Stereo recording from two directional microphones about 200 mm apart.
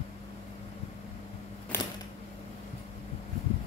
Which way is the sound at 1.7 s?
10° left (ahead or behind).